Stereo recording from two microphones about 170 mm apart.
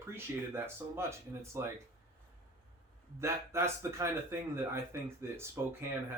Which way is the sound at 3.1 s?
15° right (ahead or behind).